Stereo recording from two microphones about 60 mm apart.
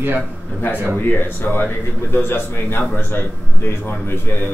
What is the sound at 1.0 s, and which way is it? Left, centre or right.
Speech, left.